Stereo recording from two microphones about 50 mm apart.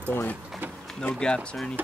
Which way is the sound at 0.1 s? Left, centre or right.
Left.